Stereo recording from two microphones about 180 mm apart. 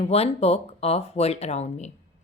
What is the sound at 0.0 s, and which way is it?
Speech, 35° left (ahead or behind).